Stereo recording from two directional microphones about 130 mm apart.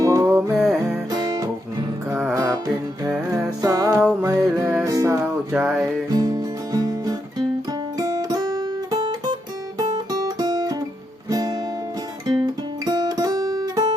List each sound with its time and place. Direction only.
0.0 s music: 25° right (ahead or behind)
0.5 s music: 5° right (ahead or behind)
1.1 s music: 30° right (ahead or behind)
5.2 s music: 10° right (ahead or behind)
6.1 s music: 30° right (ahead or behind)
7.9 s guitar: 30° right (ahead or behind)